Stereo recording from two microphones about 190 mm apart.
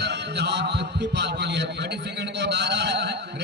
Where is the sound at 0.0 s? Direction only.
60° right (ahead or behind).